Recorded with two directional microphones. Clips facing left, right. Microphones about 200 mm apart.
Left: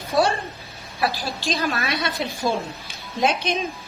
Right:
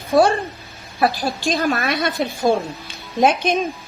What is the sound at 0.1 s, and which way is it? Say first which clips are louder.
A woman's voice: right 6 dB; 50° right (ahead or behind).